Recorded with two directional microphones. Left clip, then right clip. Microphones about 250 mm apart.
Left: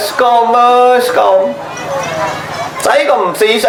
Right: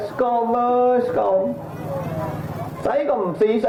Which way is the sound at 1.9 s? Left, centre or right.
Centre.